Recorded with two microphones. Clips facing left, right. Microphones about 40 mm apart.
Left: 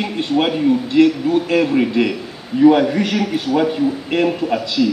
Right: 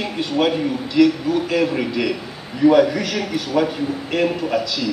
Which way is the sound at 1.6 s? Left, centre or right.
Centre.